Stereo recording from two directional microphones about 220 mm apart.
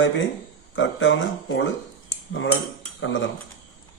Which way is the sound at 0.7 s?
60° left (ahead or behind).